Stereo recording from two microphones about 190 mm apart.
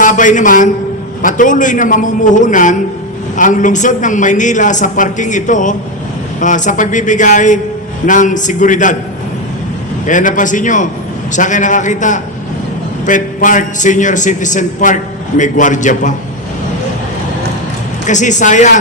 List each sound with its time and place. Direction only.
0.0 s a man's voice: 45° left (ahead or behind)
10.1 s a man's voice: 45° left (ahead or behind)
18.0 s a man's voice: 40° left (ahead or behind)